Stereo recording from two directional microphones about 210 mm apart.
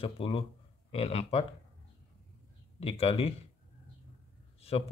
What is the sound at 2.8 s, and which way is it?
Speech, 25° left (ahead or behind).